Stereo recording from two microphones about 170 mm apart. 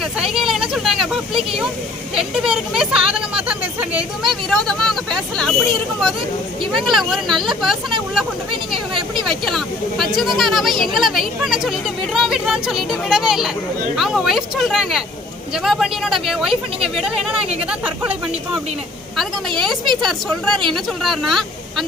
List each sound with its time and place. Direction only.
0.0 s speech: centre (ahead or behind)
6.8 s speech: centre (ahead or behind)
9.2 s speech: centre (ahead or behind)
19.6 s speech: centre (ahead or behind)